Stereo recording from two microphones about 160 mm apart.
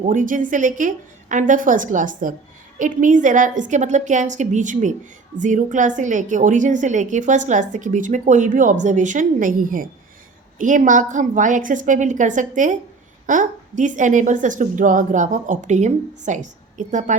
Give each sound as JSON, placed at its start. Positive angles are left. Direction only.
{"t": 0.0, "sound": "a woman's voice", "side_deg": -50}